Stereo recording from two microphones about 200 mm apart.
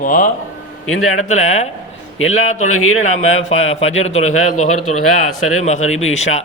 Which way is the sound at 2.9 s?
35° left (ahead or behind).